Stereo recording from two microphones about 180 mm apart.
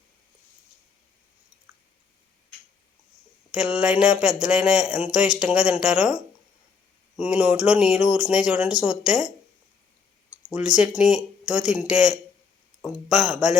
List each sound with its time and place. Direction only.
3.5 s speech: 5° right (ahead or behind)
7.2 s speech: 5° right (ahead or behind)
10.5 s speech: 5° right (ahead or behind)